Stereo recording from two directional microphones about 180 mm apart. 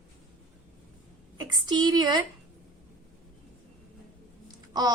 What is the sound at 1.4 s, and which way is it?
Speech, 25° right (ahead or behind).